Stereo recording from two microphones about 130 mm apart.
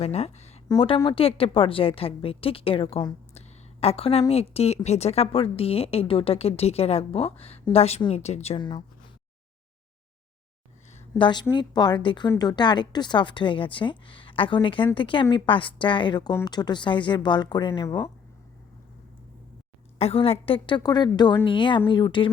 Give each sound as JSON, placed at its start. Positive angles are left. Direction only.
{"t": 0.0, "sound": "speech", "side_deg": 55}
{"t": 0.8, "sound": "a woman's voice", "side_deg": 40}
{"t": 8.5, "sound": "a woman's voice", "side_deg": 35}
{"t": 11.2, "sound": "a woman's voice", "side_deg": 35}
{"t": 20.0, "sound": "a woman's voice", "side_deg": 50}